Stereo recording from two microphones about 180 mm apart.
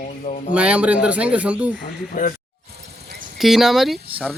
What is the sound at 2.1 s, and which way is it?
Speech, 45° left (ahead or behind).